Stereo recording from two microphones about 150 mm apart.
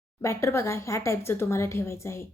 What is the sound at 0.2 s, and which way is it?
A woman's voice, 20° left (ahead or behind).